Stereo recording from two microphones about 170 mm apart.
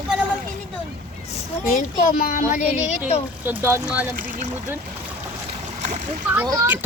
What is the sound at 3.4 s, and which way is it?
Speech, 10° right (ahead or behind).